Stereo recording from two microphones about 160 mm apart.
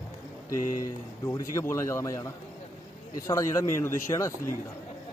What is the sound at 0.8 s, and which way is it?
Speech, 20° left (ahead or behind).